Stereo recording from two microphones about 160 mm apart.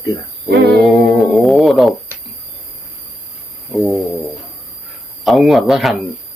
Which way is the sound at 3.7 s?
Centre (ahead or behind).